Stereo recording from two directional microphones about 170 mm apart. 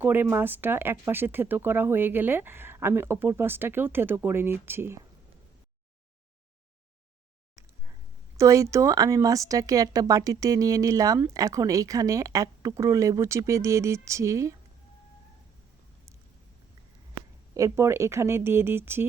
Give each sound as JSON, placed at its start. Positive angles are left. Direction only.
{"t": 0.0, "sound": "speech", "side_deg": -10}
{"t": 8.4, "sound": "speech", "side_deg": -20}
{"t": 17.5, "sound": "speech", "side_deg": -15}